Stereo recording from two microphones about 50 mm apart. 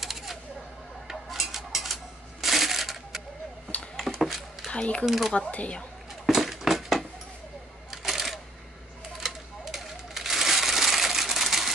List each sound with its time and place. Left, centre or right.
0.0 s typewriter: centre
1.0 s dishes: centre
2.4 s coin: centre
3.9 s a sound: centre
4.6 s speech: left
5.0 s speech: centre
5.3 s speech: left
6.2 s a sound: centre